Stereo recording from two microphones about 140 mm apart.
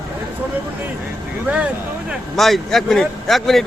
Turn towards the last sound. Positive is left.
turn(degrees=0)  # may be behind; listen again after turning